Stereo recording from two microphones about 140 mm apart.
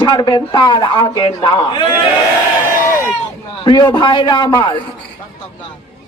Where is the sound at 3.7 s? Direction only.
30° left (ahead or behind).